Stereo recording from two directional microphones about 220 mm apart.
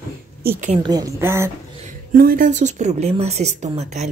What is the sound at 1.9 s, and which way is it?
A woman's voice, 40° right (ahead or behind).